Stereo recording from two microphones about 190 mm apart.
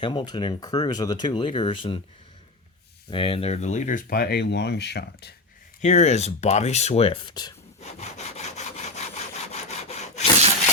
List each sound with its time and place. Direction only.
0.0 s speech: 25° left (ahead or behind)
3.1 s speech: 25° left (ahead or behind); by 5.3 s 65° left (ahead or behind)
5.8 s speech: 35° left (ahead or behind)
7.8 s sawing: 35° left (ahead or behind)